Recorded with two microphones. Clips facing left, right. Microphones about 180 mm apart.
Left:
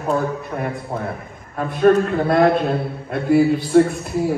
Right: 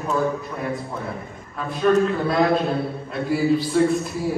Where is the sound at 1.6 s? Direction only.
55° left (ahead or behind).